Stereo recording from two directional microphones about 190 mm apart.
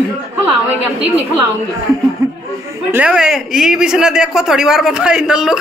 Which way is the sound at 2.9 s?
5° right (ahead or behind).